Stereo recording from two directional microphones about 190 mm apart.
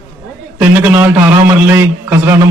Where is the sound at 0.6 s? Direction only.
10° right (ahead or behind).